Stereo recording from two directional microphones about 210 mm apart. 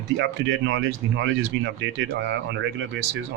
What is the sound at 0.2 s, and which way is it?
Speech, 60° right (ahead or behind).